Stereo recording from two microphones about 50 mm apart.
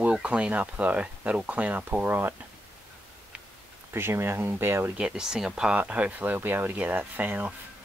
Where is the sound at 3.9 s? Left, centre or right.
Right.